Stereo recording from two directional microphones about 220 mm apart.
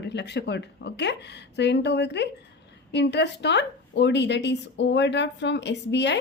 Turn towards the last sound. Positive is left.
turn(degrees=50)  # may be behind; listen again after turning